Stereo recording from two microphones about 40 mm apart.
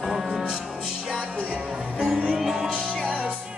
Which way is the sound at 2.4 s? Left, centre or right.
Centre.